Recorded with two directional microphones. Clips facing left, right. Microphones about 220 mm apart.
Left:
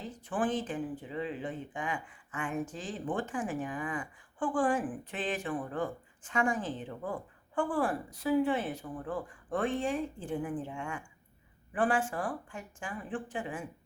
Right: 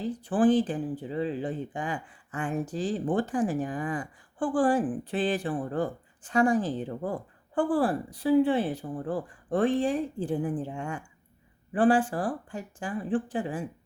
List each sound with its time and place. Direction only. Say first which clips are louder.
0.0 s speech: right 10 dB; 35° right (ahead or behind)